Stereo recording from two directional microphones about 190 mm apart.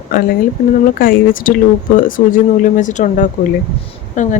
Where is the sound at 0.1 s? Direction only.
50° left (ahead or behind).